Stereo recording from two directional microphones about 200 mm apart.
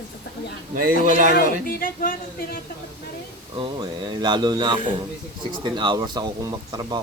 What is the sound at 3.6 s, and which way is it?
Speech, 20° right (ahead or behind).